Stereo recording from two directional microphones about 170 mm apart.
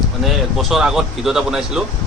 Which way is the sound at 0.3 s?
Centre (ahead or behind).